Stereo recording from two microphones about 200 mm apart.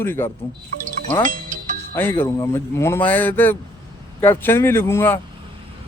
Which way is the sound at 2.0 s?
10° left (ahead or behind).